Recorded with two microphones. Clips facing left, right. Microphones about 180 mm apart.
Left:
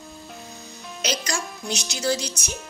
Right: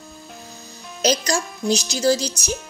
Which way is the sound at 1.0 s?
40° right (ahead or behind).